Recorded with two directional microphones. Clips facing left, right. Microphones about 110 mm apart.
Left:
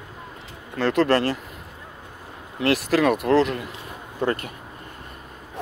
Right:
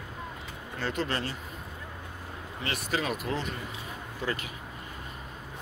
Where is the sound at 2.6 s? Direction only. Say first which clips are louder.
Left 12 dB; 80° left.